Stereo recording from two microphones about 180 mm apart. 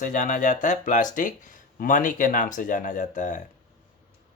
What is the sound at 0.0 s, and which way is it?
Speech, 45° left (ahead or behind).